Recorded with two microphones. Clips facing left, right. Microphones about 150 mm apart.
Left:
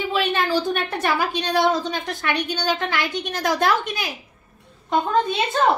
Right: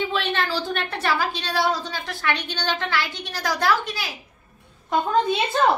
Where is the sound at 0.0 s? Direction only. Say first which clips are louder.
Left 2 dB; 10° left (ahead or behind).